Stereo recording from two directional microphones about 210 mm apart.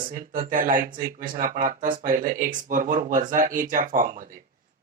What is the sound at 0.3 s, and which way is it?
Speech, 40° right (ahead or behind).